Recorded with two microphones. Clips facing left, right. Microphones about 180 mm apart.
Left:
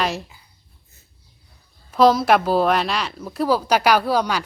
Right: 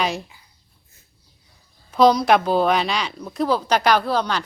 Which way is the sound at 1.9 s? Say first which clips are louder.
Even; centre (ahead or behind).